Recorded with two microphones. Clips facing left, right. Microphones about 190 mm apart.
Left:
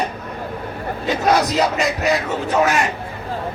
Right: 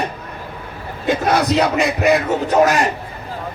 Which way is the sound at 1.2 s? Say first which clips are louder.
Even; 60° right (ahead or behind).